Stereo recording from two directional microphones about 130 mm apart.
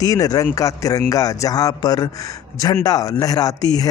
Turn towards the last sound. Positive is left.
turn(degrees=30)  # may be behind; listen again after turning